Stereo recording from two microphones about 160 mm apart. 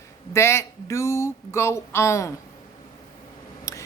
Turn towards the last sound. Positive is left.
turn(degrees=20)  # may be behind; listen again after turning